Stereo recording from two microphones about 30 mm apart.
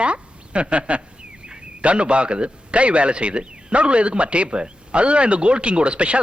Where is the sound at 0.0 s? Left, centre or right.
Right.